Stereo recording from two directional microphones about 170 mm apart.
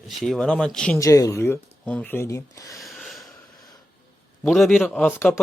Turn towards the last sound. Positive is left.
turn(degrees=15)  # may be behind; listen again after turning